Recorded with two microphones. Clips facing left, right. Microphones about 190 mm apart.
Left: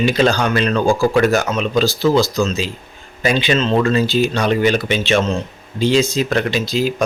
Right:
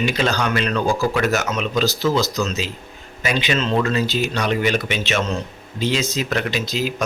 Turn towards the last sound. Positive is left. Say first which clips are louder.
# left 5 dB
turn(degrees=30)  # may be behind; listen again after turning